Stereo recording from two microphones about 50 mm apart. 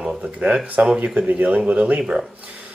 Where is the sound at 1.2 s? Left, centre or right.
Right.